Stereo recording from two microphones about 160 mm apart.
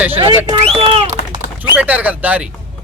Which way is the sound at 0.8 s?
35° right (ahead or behind).